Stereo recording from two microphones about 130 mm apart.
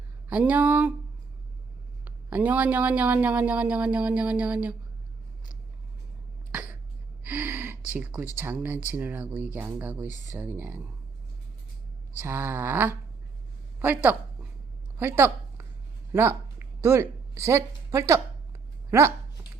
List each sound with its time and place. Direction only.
0.3 s speech: 10° right (ahead or behind)
2.0 s speech: 10° right (ahead or behind)
6.5 s cough: 10° right (ahead or behind)
7.3 s gasp: 15° right (ahead or behind)
7.9 s speech: 15° right (ahead or behind)
12.2 s a woman's voice: 15° right (ahead or behind)
14.9 s a sound: 20° right (ahead or behind)
17.4 s a woman's voice: 20° right (ahead or behind)